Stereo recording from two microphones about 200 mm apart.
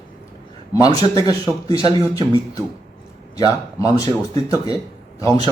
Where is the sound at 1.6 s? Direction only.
25° right (ahead or behind).